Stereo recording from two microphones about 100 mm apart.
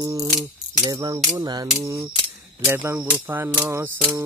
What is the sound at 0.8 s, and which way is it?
Speech, 45° right (ahead or behind).